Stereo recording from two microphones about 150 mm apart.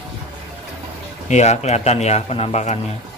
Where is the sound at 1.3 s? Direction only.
50° left (ahead or behind).